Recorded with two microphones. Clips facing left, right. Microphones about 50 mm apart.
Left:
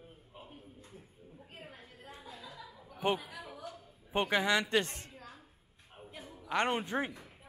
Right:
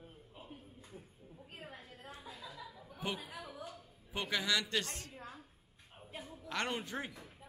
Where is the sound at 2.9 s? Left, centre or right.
Left.